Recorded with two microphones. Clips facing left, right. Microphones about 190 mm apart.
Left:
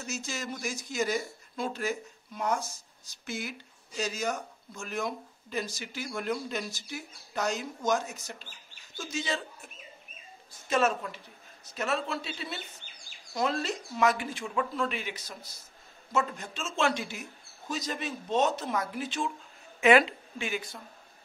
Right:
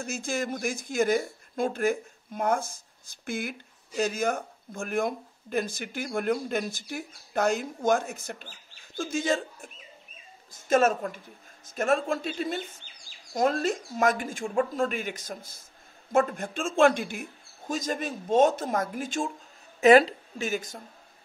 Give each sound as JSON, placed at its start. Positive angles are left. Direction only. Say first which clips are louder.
{"t": 0.0, "sound": "a man's voice", "louder": "right 6 dB", "side_deg": -50}
{"t": 10.7, "sound": "speech", "louder": "right 5 dB", "side_deg": -45}